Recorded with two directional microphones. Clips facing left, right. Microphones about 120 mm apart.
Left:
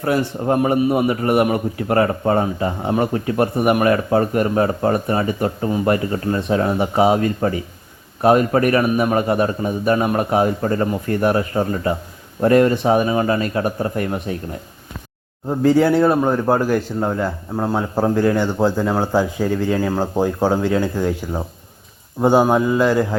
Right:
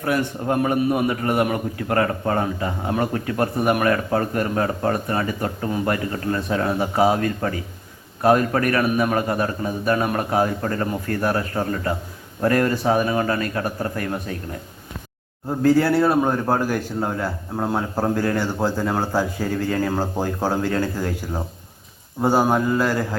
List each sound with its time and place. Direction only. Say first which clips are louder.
0.0 s a man's voice: left 3 dB; 30° left (ahead or behind)
15.6 s a man's voice: left 3 dB; centre (ahead or behind)
17.1 s speech: left 4 dB; centre (ahead or behind)
22.2 s speech: left 4 dB; 5° right (ahead or behind)